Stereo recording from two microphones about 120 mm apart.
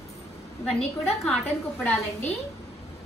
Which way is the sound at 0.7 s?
5° left (ahead or behind).